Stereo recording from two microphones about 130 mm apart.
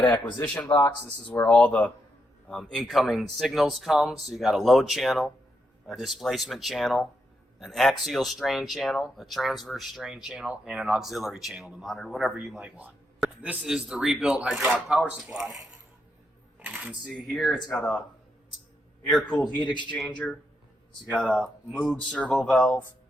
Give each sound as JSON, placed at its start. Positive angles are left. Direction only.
{"t": 0.0, "sound": "speech", "side_deg": 20}
{"t": 0.4, "sound": "speech", "side_deg": 10}
{"t": 16.6, "sound": "speech", "side_deg": -15}
{"t": 19.3, "sound": "speech", "side_deg": 10}
{"t": 19.5, "sound": "a man's voice", "side_deg": 35}
{"t": 19.9, "sound": "speech", "side_deg": 10}
{"t": 22.1, "sound": "speech", "side_deg": 5}